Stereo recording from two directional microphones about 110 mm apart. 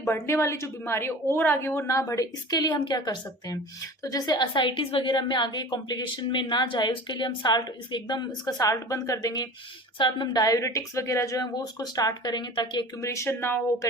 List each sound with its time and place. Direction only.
0.1 s a woman's voice: 25° left (ahead or behind); by 12.8 s 40° left (ahead or behind)
13.0 s a woman's voice: 25° left (ahead or behind)